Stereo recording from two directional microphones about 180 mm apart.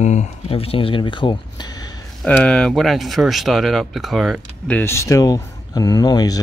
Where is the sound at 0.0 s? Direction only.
40° left (ahead or behind); by 1.9 s 25° left (ahead or behind).